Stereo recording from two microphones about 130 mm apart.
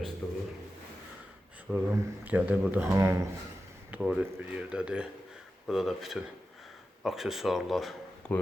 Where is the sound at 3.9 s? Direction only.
10° right (ahead or behind).